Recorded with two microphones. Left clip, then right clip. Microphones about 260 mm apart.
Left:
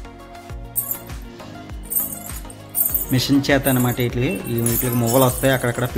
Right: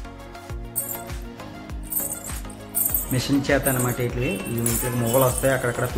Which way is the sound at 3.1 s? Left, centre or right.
Left.